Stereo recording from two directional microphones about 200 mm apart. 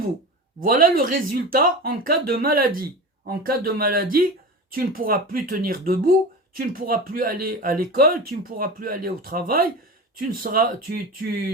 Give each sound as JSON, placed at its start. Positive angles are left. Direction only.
{"t": 0.6, "sound": "speech", "side_deg": -45}